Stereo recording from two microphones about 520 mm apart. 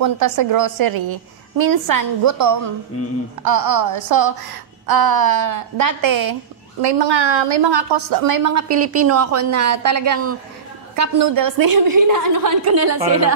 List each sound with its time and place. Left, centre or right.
0.0 s a woman's voice: right
0.9 s a woman's voice: right
1.6 s a woman's voice: right
6.8 s a woman's voice: right